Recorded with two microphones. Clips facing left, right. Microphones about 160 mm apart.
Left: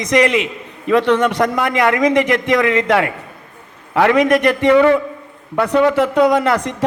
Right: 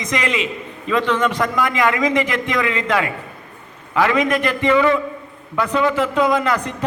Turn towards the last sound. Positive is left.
turn(degrees=85)